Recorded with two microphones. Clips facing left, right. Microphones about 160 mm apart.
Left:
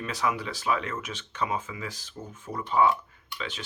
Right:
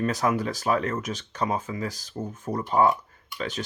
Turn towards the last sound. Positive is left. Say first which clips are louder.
# right 6 dB
turn(degrees=-40)  # may be behind; listen again after turning